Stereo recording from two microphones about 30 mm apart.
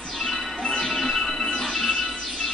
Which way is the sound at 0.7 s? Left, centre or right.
Centre.